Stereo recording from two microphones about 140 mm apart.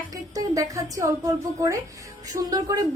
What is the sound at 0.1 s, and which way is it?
A woman's voice, 25° right (ahead or behind).